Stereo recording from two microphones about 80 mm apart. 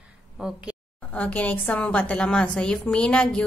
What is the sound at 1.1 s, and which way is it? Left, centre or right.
A woman's voice, centre.